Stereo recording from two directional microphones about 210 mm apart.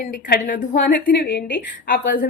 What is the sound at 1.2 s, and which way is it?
Speech, 60° left (ahead or behind).